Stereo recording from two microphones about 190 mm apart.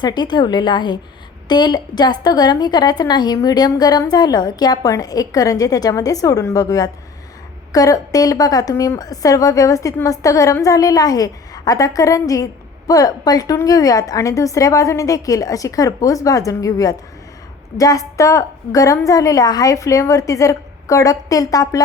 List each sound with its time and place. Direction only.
0.0 s a woman's voice: 25° left (ahead or behind)